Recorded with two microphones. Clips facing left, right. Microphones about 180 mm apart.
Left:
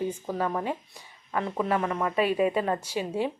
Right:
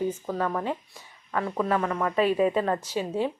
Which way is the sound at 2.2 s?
35° right (ahead or behind).